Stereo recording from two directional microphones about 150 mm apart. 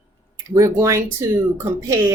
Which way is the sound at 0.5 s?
20° right (ahead or behind).